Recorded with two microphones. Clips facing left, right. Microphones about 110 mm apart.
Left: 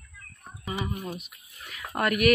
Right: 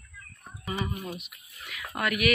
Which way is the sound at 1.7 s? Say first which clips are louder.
Left 3 dB; 35° left (ahead or behind).